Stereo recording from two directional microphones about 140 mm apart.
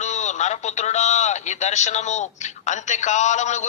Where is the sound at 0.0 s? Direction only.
55° left (ahead or behind).